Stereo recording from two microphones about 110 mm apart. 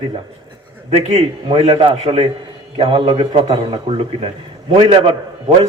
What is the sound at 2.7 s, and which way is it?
A man's voice, 60° right (ahead or behind).